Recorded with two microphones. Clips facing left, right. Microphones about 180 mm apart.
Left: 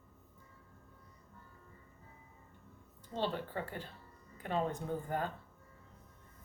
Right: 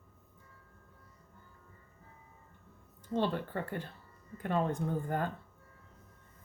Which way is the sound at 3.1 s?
50° right (ahead or behind).